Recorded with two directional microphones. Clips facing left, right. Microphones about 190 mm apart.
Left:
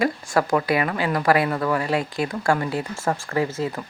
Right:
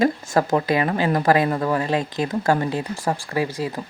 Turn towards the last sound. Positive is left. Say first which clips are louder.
# even
turn(degrees=-15)  # may be behind; listen again after turning